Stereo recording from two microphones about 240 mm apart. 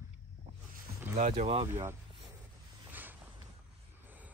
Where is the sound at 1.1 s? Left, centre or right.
Right.